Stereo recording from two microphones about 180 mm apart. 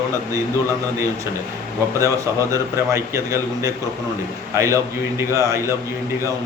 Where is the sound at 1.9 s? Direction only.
15° right (ahead or behind).